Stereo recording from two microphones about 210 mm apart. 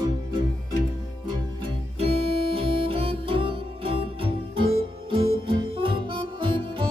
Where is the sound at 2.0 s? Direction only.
30° right (ahead or behind).